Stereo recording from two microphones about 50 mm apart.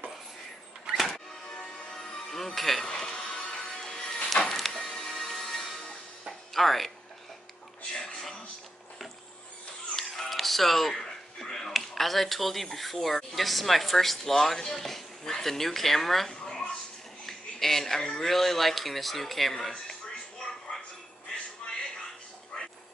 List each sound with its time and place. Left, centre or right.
0.9 s music: centre
1.5 s music: centre
6.5 s speech: centre
7.9 s a sound: centre
10.0 s music: centre
10.3 s a sound: centre
11.7 s speech: centre
19.7 s television: centre
21.6 s a sound: centre